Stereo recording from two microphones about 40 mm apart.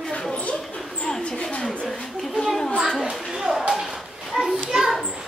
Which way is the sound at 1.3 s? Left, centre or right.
Left.